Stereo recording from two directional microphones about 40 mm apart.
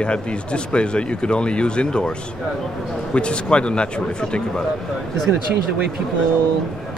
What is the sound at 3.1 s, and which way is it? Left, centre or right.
Speech, left.